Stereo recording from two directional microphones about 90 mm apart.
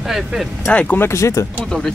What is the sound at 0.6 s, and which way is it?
Speech, 20° left (ahead or behind).